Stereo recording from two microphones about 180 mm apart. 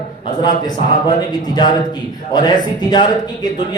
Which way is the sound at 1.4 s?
20° left (ahead or behind).